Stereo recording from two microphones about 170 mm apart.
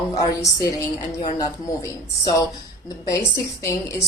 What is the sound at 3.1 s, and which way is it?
Speech, 20° left (ahead or behind).